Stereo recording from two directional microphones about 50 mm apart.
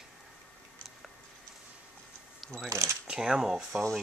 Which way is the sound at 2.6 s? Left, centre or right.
Right.